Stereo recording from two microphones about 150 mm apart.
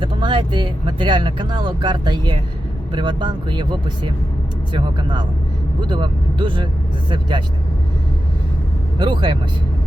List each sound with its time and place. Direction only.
0.0 s speech: 35° right (ahead or behind)
9.0 s speech: 30° right (ahead or behind)